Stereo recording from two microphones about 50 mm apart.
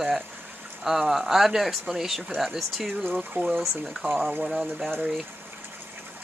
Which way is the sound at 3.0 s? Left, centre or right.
Right.